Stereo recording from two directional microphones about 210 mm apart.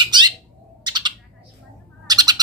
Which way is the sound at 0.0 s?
20° right (ahead or behind).